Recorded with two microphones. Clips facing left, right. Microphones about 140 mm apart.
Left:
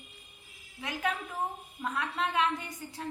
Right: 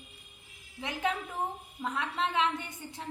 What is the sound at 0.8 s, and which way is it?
A woman's voice, 25° right (ahead or behind).